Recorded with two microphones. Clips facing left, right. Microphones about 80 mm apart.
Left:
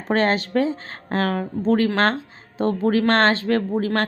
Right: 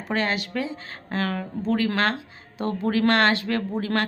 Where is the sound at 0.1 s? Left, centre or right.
Left.